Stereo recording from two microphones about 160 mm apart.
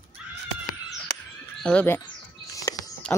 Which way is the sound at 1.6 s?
10° left (ahead or behind).